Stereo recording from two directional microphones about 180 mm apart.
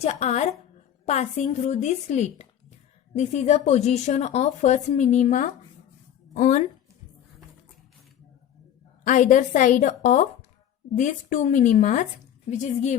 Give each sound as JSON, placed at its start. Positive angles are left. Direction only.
{"t": 0.0, "sound": "a woman's voice", "side_deg": 35}
{"t": 9.0, "sound": "a woman's voice", "side_deg": 45}